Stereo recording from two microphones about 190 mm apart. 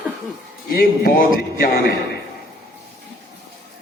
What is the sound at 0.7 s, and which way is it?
Speech, 50° left (ahead or behind).